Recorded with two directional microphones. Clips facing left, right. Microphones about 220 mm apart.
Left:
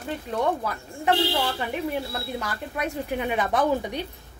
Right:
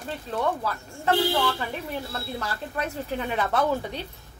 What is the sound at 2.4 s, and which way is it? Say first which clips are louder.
Speech: left 1 dB; 15° left (ahead or behind).